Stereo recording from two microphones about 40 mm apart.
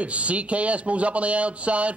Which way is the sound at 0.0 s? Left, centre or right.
Right.